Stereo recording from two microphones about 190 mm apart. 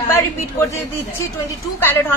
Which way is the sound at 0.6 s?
15° left (ahead or behind).